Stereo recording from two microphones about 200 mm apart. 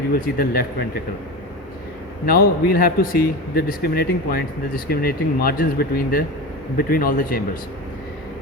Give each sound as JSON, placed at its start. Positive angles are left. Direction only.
{"t": 0.1, "sound": "a man's voice", "side_deg": 45}
{"t": 2.2, "sound": "a man's voice", "side_deg": 50}